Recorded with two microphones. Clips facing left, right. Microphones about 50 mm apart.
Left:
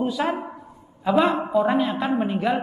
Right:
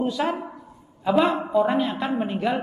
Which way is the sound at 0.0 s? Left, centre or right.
Centre.